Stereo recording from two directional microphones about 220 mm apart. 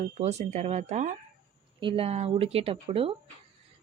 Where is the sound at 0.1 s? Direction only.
30° right (ahead or behind).